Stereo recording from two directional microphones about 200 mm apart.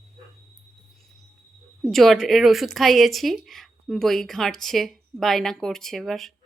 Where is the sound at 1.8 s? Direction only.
Centre (ahead or behind).